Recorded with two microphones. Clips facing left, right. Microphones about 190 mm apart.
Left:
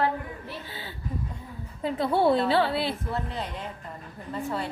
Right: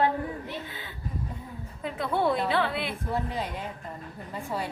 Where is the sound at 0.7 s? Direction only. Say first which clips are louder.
Left 2 dB; 30° left (ahead or behind).